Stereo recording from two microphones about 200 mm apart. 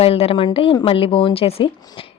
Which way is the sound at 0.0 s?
30° left (ahead or behind).